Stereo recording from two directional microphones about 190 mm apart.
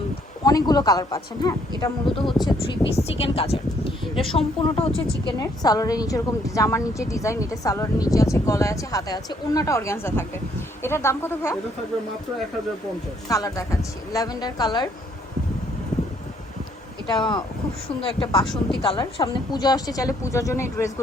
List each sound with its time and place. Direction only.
0.4 s a woman's voice: 20° left (ahead or behind)
5.2 s a woman's voice: 20° left (ahead or behind)
13.2 s a woman's voice: 15° left (ahead or behind)
17.1 s a woman's voice: 25° left (ahead or behind)